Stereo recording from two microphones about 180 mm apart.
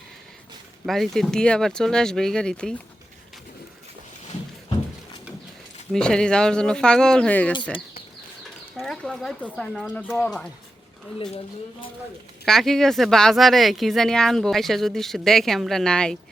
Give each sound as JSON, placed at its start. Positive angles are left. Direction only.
{"t": 0.9, "sound": "speech", "side_deg": 0}
{"t": 5.9, "sound": "speech", "side_deg": 5}
{"t": 8.7, "sound": "speech", "side_deg": 0}
{"t": 12.5, "sound": "speech", "side_deg": 0}